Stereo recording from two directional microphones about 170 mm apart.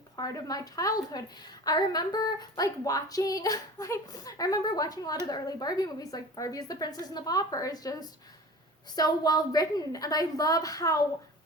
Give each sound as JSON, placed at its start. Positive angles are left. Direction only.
{"t": 0.2, "sound": "a woman's voice", "side_deg": 20}